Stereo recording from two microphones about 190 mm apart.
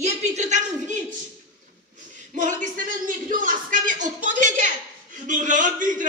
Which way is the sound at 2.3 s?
40° right (ahead or behind).